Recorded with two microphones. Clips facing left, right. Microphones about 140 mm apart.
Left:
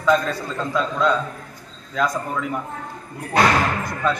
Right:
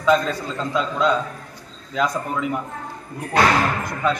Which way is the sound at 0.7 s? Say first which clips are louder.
Even; 15° right (ahead or behind).